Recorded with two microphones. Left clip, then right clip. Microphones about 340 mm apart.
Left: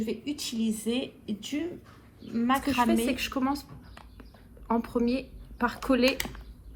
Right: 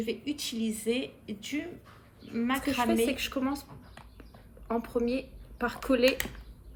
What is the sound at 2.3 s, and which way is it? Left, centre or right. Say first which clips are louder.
Speech: left 4 dB; centre.